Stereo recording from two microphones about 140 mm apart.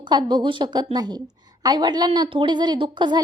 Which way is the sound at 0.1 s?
30° right (ahead or behind).